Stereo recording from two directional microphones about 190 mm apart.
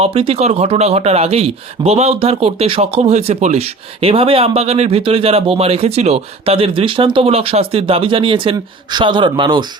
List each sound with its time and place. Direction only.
0.0 s speech: 30° right (ahead or behind)